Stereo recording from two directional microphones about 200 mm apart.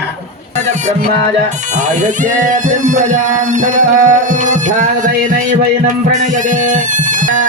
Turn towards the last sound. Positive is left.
turn(degrees=-40)  # may be behind; listen again after turning